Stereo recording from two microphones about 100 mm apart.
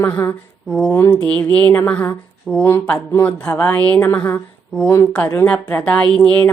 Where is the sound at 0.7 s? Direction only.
10° left (ahead or behind).